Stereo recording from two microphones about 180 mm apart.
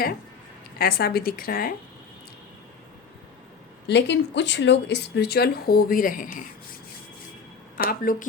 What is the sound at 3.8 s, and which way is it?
Speech, 75° left (ahead or behind).